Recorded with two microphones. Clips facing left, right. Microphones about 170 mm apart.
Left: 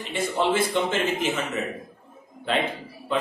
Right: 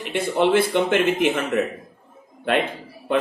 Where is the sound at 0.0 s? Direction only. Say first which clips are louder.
Right 5 dB; 60° right (ahead or behind).